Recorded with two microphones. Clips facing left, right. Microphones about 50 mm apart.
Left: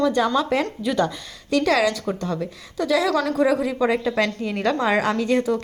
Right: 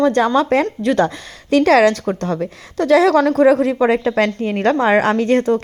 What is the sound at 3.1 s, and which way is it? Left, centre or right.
Speech, right.